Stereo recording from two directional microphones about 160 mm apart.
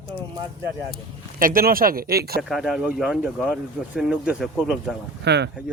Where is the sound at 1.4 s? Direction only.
65° right (ahead or behind).